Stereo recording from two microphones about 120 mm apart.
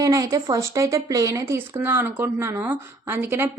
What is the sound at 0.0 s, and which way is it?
Speech, 30° right (ahead or behind).